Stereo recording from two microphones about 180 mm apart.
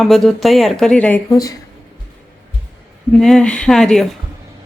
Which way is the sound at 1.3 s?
20° left (ahead or behind).